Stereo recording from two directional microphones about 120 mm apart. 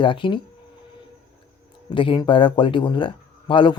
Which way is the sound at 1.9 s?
45° left (ahead or behind).